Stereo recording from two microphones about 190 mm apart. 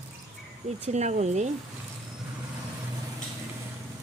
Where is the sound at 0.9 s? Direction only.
35° right (ahead or behind).